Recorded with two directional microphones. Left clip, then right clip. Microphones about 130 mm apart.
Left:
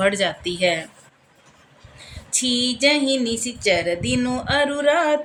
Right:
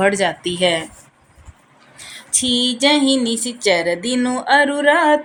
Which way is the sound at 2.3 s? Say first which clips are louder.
Right 4 dB; 20° right (ahead or behind).